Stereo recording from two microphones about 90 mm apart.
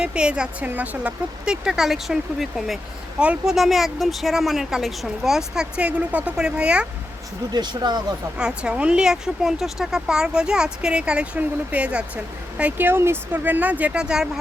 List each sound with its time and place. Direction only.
0.0 s speech: 10° right (ahead or behind)
1.5 s speech: 5° right (ahead or behind)
7.5 s speech: 55° right (ahead or behind)
8.4 s speech: 10° right (ahead or behind)